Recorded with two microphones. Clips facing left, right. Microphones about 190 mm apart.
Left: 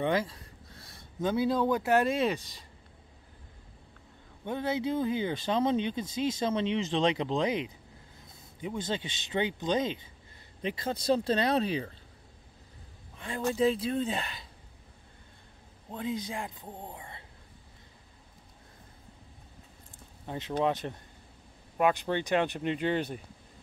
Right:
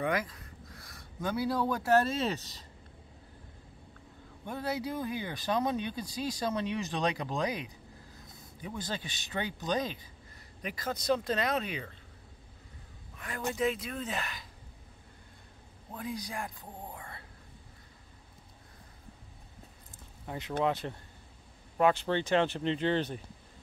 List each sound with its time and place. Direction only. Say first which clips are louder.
0.0 s speech: left 3 dB; 30° left (ahead or behind)
4.5 s speech: left 4 dB; 20° left (ahead or behind)
13.2 s speech: left 4 dB; 30° left (ahead or behind)
15.9 s speech: left 4 dB; 25° left (ahead or behind)
20.2 s speech: left 2 dB; 20° left (ahead or behind)